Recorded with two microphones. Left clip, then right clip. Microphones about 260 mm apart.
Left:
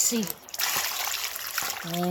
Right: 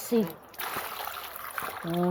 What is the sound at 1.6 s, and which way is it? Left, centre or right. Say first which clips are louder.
Trickle: left 1 dB; centre.